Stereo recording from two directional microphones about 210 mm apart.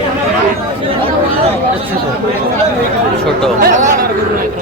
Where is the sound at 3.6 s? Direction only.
35° right (ahead or behind).